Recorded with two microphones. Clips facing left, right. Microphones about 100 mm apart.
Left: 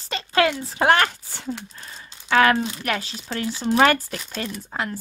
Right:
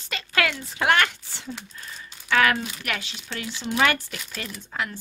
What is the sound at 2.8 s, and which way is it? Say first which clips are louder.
Speech: left 5 dB; 35° left (ahead or behind).